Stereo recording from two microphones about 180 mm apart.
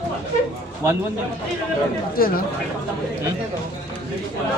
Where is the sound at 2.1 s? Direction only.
55° left (ahead or behind).